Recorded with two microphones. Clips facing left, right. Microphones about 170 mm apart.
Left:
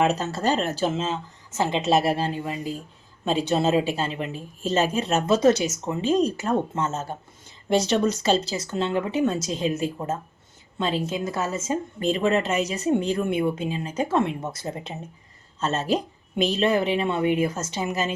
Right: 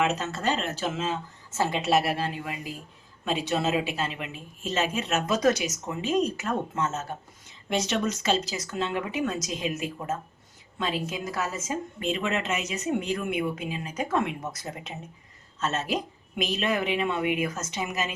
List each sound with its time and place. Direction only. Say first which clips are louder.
0.0 s a woman's voice: left 4 dB; 35° left (ahead or behind)
1.5 s a woman's voice: left 3 dB; 20° left (ahead or behind)